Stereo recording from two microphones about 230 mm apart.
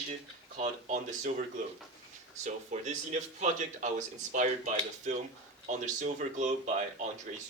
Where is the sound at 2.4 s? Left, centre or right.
Right.